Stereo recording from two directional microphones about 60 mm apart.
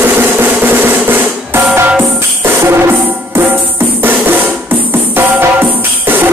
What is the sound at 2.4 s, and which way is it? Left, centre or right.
Music, right.